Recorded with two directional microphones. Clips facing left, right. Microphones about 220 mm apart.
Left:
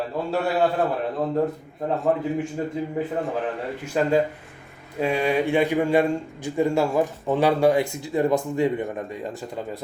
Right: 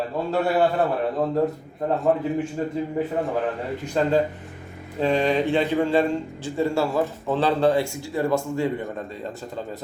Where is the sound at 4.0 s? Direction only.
10° left (ahead or behind).